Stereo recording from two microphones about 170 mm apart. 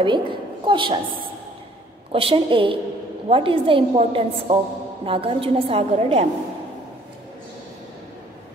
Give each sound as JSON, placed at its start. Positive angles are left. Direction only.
{"t": 0.0, "sound": "a woman's voice", "side_deg": -30}
{"t": 2.1, "sound": "a woman's voice", "side_deg": -30}